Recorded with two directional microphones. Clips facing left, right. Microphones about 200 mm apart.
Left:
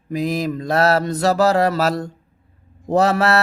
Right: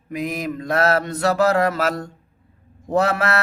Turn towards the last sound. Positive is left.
turn(degrees=35)  # may be behind; listen again after turning